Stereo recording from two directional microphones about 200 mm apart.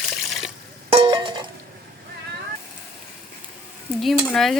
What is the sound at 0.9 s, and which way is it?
Music, 25° right (ahead or behind).